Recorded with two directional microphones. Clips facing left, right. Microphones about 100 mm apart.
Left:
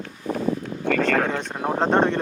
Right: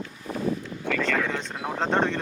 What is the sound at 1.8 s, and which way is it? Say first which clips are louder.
Speech: left 5 dB; 15° left (ahead or behind).